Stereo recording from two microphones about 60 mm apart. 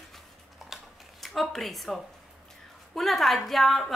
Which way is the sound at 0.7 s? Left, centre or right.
Centre.